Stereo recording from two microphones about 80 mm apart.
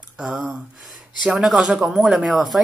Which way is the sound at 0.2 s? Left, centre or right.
Centre.